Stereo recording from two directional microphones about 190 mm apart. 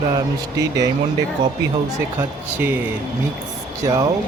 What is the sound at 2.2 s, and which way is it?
Speech, 10° right (ahead or behind).